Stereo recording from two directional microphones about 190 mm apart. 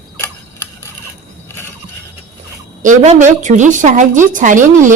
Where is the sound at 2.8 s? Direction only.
40° right (ahead or behind).